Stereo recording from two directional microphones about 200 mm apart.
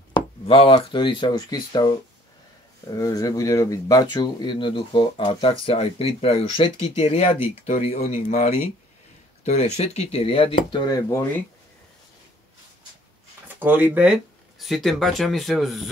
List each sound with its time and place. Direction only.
0.1 s speech: 25° left (ahead or behind)
13.6 s speech: 10° right (ahead or behind)